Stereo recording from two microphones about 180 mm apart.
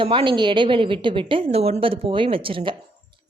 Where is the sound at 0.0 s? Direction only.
30° right (ahead or behind).